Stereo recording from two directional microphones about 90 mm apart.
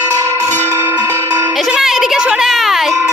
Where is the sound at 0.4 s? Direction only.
30° right (ahead or behind).